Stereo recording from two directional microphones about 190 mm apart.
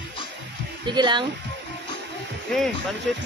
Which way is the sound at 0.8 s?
25° right (ahead or behind).